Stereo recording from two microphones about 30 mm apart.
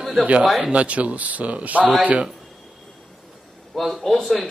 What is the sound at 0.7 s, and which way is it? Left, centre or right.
Speech, right.